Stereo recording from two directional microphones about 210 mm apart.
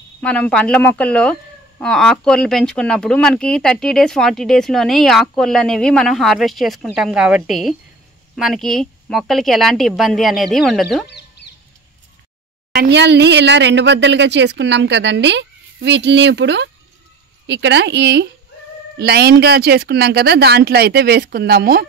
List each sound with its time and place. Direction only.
0.2 s speech: 5° left (ahead or behind)
12.7 s speech: 55° right (ahead or behind)